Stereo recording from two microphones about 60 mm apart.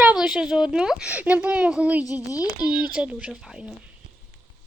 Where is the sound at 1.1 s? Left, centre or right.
Right.